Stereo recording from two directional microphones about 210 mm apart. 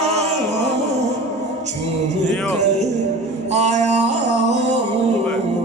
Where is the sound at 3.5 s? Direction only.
30° right (ahead or behind).